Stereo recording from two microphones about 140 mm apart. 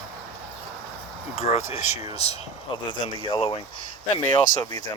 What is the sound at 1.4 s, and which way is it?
Speech, 50° left (ahead or behind).